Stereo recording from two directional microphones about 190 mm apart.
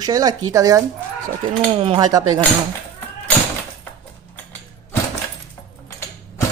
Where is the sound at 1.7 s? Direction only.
30° right (ahead or behind).